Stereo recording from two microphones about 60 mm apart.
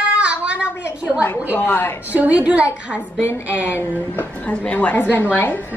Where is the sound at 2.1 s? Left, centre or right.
Right.